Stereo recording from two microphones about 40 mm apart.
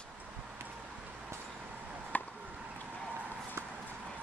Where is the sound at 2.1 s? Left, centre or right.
Left.